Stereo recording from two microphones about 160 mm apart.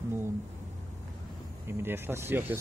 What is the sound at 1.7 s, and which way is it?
Speech, 15° right (ahead or behind).